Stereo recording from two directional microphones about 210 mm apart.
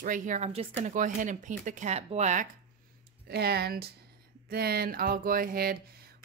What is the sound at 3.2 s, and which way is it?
Speech, 50° right (ahead or behind).